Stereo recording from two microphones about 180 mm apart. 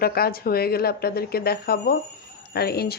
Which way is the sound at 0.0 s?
55° left (ahead or behind).